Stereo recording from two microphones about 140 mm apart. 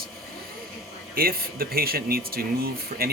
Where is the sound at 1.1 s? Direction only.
90° right.